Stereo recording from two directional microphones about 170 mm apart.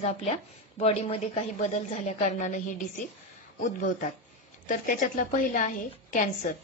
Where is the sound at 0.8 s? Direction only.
35° left (ahead or behind).